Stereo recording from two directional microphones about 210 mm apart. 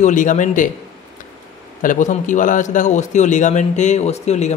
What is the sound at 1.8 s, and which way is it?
A man's voice, 40° left (ahead or behind).